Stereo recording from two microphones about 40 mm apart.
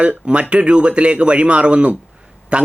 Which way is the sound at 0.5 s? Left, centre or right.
Right.